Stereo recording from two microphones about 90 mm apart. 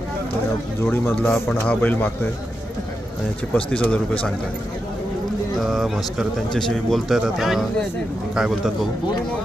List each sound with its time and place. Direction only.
0.8 s a man's voice: 25° left (ahead or behind)
3.5 s a man's voice: 15° left (ahead or behind)
5.7 s speech: centre (ahead or behind)